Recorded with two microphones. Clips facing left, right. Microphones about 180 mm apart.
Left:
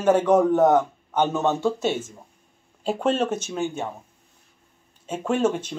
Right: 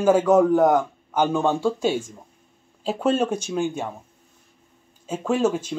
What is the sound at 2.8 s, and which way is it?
Speech, 5° right (ahead or behind).